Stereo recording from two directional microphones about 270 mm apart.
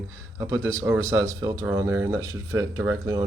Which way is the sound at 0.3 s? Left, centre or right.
Centre.